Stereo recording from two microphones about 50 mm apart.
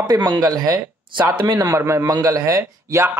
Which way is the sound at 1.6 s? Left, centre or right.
Right.